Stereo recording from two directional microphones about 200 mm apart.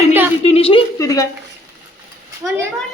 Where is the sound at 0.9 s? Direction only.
15° left (ahead or behind).